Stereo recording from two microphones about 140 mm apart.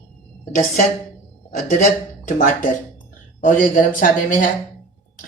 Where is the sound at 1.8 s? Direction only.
75° left (ahead or behind).